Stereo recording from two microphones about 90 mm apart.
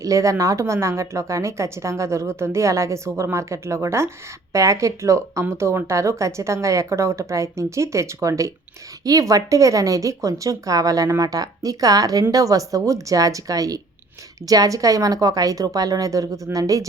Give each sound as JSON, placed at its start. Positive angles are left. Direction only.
{"t": 0.0, "sound": "speech", "side_deg": -35}